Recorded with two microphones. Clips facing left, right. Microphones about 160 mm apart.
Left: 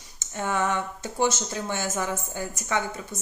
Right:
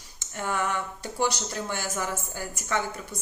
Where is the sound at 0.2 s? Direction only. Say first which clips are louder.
Left 3 dB; 20° left (ahead or behind).